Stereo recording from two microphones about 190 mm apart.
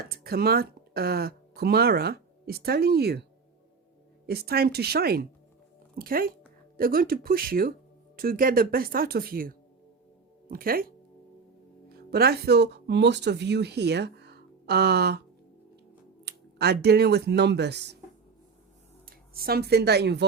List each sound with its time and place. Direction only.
0.0 s speech: 55° right (ahead or behind)
4.3 s speech: 55° right (ahead or behind)
16.2 s speech: 60° right (ahead or behind)
19.0 s speech: 55° right (ahead or behind)